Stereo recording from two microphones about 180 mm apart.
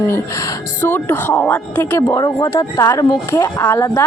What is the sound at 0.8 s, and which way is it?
Speech, 10° left (ahead or behind).